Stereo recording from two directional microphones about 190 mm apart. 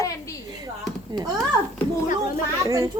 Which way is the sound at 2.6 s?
15° right (ahead or behind).